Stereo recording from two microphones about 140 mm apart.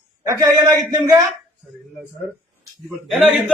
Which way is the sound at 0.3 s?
25° right (ahead or behind).